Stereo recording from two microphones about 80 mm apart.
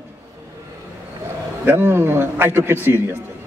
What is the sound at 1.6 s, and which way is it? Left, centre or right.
A man's voice, right.